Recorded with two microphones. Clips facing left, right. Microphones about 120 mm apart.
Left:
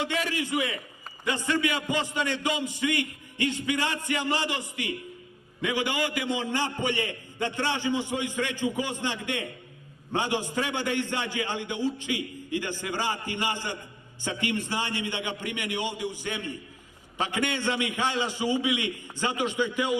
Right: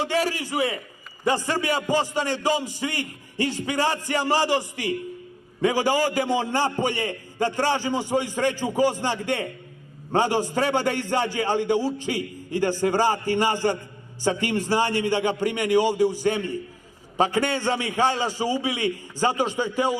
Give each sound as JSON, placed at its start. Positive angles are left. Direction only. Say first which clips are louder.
{"t": 0.0, "sound": "a man's voice", "louder": "right 5 dB", "side_deg": -35}